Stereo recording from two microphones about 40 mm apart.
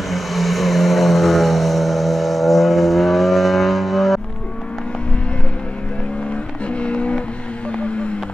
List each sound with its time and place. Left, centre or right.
0.1 s vehicle: centre
6.7 s music: left